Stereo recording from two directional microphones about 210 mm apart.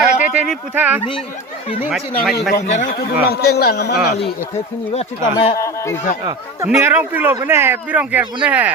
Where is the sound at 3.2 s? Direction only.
50° left (ahead or behind).